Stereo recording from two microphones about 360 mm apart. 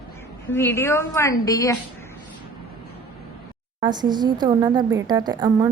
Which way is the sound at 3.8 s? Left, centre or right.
Centre.